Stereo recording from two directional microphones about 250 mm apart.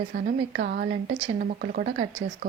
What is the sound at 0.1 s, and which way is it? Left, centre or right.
A woman's voice, right.